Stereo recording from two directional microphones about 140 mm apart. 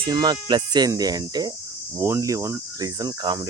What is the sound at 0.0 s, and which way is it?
Speech, 30° right (ahead or behind).